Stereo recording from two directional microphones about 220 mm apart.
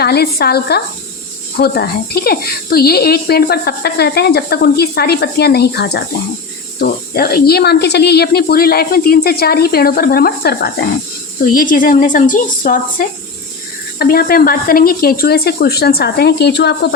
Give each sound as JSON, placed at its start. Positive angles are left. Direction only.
{"t": 0.0, "sound": "a woman's voice", "side_deg": 45}